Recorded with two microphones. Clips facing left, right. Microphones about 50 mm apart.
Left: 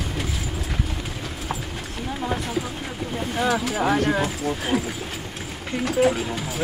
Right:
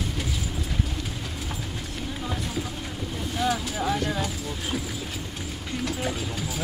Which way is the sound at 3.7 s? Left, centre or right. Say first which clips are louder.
Left 6 dB; left.